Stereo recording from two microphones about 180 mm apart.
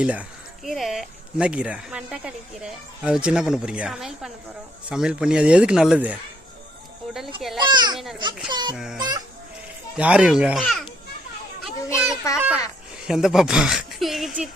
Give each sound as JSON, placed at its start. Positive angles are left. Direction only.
{"t": 0.0, "sound": "speech", "side_deg": -5}
{"t": 7.6, "sound": "a child's voice", "side_deg": -25}
{"t": 8.7, "sound": "speech", "side_deg": -5}
{"t": 9.0, "sound": "a child's voice", "side_deg": -25}
{"t": 10.0, "sound": "speech", "side_deg": -5}
{"t": 11.9, "sound": "children playing", "side_deg": 15}
{"t": 13.1, "sound": "speech", "side_deg": 0}